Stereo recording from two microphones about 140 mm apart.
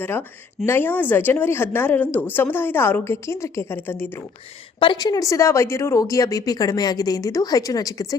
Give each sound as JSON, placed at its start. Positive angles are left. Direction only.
{"t": 0.0, "sound": "a woman's voice", "side_deg": 15}
{"t": 4.8, "sound": "a woman's voice", "side_deg": 35}